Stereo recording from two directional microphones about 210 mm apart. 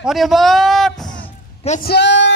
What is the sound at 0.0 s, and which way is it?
Speech, centre (ahead or behind).